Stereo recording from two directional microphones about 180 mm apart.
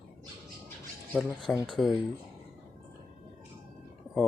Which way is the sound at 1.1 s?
5° right (ahead or behind).